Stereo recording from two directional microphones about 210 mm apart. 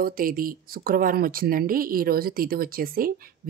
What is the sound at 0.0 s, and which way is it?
Speech, 45° right (ahead or behind).